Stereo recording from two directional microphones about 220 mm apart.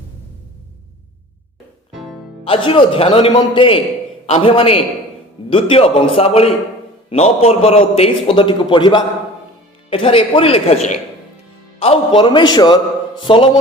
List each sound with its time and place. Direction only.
2.4 s a man's voice: 25° left (ahead or behind)